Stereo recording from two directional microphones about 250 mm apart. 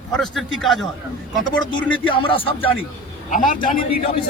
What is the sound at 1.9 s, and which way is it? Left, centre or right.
Speech, left.